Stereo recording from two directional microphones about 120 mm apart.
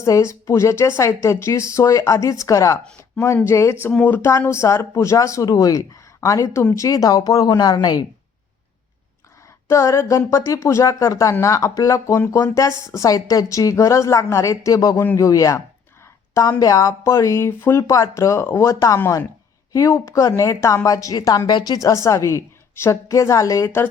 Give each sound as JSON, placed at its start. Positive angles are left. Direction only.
{"t": 0.0, "sound": "speech", "side_deg": 25}
{"t": 9.6, "sound": "speech", "side_deg": 25}